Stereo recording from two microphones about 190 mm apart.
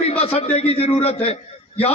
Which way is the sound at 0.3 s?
30° left (ahead or behind).